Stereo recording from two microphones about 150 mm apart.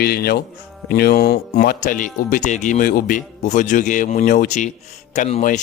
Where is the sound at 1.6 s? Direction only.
70° left (ahead or behind).